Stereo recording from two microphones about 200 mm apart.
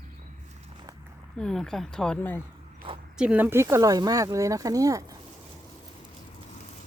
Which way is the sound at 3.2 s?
5° right (ahead or behind).